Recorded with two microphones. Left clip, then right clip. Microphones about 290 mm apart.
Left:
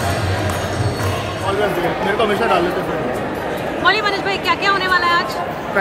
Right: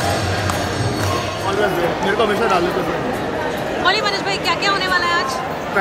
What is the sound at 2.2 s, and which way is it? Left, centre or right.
Speech, centre.